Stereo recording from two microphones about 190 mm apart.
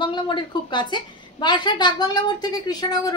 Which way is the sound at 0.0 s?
25° left (ahead or behind).